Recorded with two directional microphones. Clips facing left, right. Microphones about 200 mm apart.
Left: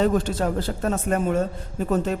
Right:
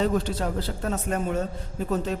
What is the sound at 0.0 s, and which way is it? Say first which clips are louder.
A man's voice: left 4 dB; 50° left (ahead or behind).